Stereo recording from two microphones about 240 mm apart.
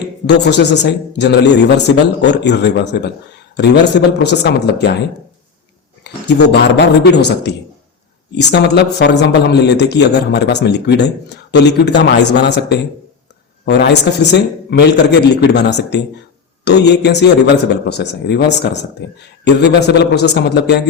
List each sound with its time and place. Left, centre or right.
0.3 s a man's voice: left
6.0 s a man's voice: left